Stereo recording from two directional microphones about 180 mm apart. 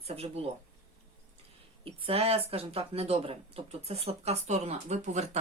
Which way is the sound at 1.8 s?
30° right (ahead or behind).